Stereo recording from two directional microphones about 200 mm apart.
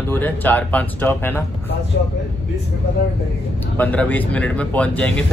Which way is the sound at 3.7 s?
10° left (ahead or behind).